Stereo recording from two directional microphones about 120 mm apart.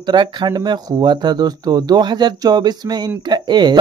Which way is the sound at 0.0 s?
40° right (ahead or behind).